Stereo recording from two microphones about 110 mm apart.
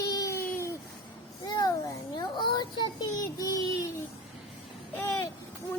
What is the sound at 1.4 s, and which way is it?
Child singing, 40° left (ahead or behind).